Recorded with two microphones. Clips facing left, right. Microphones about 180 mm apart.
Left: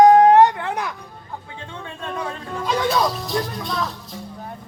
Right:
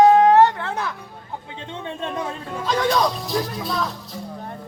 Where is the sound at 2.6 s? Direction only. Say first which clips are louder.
Even; 5° left (ahead or behind).